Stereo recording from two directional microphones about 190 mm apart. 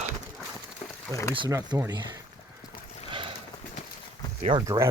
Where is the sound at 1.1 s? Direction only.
15° left (ahead or behind).